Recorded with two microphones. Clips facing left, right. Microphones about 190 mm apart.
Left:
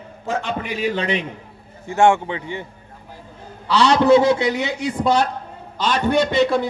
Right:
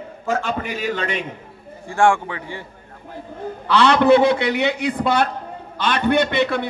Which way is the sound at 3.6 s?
55° right (ahead or behind).